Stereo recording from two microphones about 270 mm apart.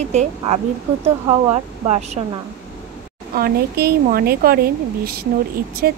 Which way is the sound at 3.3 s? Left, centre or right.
Right.